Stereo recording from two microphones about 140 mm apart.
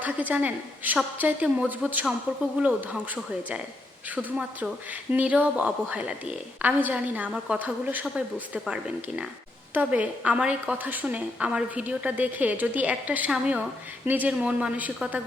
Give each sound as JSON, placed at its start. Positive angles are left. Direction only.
{"t": 0.0, "sound": "a woman's voice", "side_deg": -10}
{"t": 4.1, "sound": "a woman's voice", "side_deg": -10}